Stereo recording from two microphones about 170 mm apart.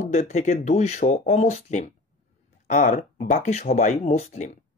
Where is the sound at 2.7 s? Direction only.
50° left (ahead or behind).